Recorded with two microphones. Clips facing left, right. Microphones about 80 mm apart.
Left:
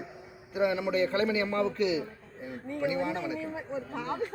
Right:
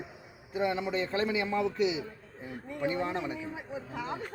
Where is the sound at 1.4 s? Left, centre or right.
Centre.